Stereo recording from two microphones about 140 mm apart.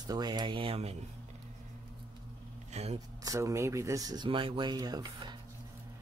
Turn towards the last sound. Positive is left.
turn(degrees=-30)  # may be behind; listen again after turning